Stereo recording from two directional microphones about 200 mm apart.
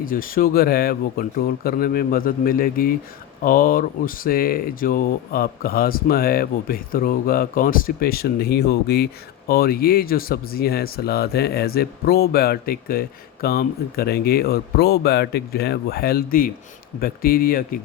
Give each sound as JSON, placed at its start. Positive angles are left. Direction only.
{"t": 0.0, "sound": "speech", "side_deg": 45}